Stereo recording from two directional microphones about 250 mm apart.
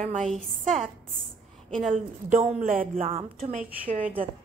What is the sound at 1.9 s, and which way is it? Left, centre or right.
A woman's voice, right.